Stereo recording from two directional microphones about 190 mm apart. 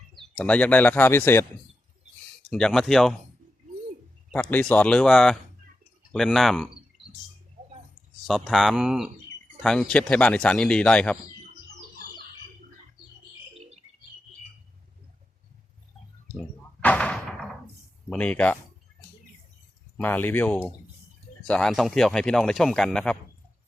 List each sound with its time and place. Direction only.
0.2 s speech: 5° left (ahead or behind)
2.5 s speech: 5° left (ahead or behind)
4.3 s speech: 10° left (ahead or behind)
8.3 s speech: centre (ahead or behind)
13.5 s bird: 35° right (ahead or behind)
16.3 s a sound: 5° left (ahead or behind)
18.1 s speech: 5° left (ahead or behind)
20.0 s speech: 10° left (ahead or behind)